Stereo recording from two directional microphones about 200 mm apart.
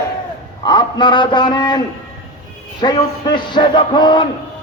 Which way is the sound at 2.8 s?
20° left (ahead or behind).